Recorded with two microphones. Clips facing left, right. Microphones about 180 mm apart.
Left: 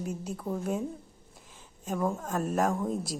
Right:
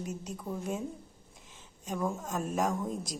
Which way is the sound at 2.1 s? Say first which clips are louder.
Left 3 dB; 5° left (ahead or behind).